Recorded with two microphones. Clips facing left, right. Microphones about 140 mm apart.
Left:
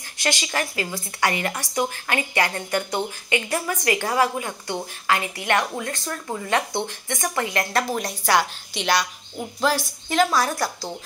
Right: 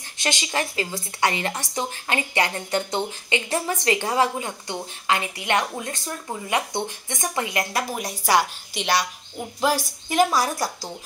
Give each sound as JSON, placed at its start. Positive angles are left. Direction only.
{"t": 0.2, "sound": "a woman's voice", "side_deg": -20}